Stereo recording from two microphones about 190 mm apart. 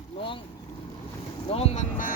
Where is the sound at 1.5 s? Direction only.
30° left (ahead or behind).